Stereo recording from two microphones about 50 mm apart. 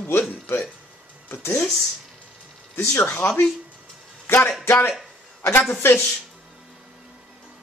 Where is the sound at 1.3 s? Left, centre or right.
Left.